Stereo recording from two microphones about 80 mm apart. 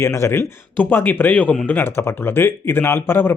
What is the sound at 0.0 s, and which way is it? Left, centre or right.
Speech, left.